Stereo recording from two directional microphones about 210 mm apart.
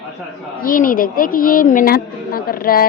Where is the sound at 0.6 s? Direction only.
40° left (ahead or behind).